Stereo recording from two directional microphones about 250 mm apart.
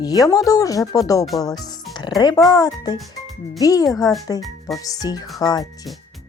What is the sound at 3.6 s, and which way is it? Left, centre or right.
Speech, centre.